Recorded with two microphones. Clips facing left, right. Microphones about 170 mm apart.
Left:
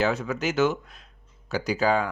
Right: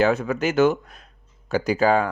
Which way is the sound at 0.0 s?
55° right (ahead or behind).